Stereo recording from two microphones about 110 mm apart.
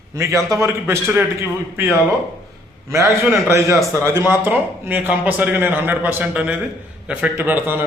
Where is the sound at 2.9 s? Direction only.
25° right (ahead or behind).